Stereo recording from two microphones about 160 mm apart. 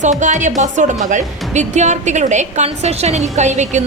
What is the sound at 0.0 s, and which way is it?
Speech, 50° right (ahead or behind).